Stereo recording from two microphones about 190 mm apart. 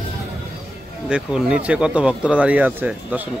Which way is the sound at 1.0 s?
5° right (ahead or behind).